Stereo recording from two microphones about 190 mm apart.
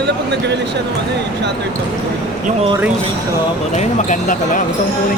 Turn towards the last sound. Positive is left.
turn(degrees=40)  # may be behind; listen again after turning